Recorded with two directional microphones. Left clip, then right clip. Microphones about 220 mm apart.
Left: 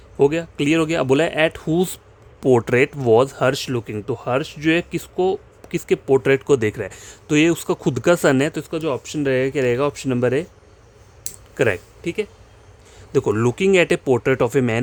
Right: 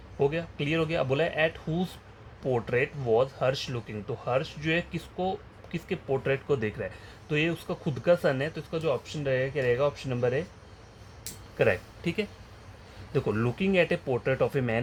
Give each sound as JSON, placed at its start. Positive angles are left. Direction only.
{"t": 0.2, "sound": "speech", "side_deg": 70}
{"t": 11.5, "sound": "speech", "side_deg": 50}
{"t": 12.0, "sound": "speech", "side_deg": 30}
{"t": 13.1, "sound": "speech", "side_deg": 45}